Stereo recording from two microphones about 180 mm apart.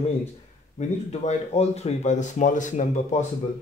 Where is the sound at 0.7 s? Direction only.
40° left (ahead or behind).